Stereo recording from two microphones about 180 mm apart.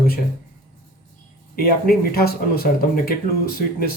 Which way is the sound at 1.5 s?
55° left (ahead or behind).